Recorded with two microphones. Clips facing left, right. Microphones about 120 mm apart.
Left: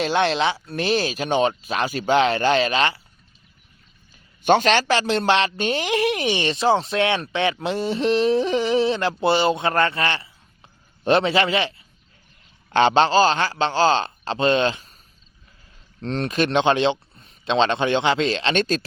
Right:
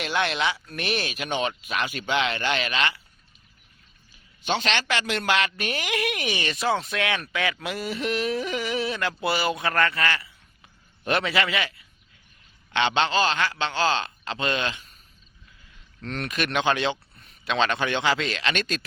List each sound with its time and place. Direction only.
0.0 s speech: 30° left (ahead or behind)
4.4 s speech: 45° left (ahead or behind)
16.0 s speech: 30° left (ahead or behind)